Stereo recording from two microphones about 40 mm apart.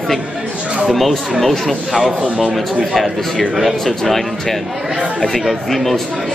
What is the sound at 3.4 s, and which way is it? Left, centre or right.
Speech, centre.